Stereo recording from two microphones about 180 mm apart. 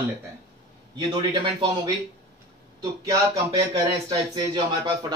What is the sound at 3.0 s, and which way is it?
Speech, 20° right (ahead or behind).